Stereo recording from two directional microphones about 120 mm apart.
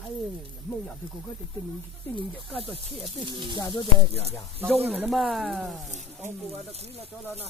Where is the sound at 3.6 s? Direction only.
35° left (ahead or behind).